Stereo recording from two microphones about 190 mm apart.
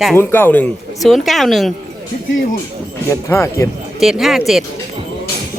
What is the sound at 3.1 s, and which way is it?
Speech, 15° left (ahead or behind).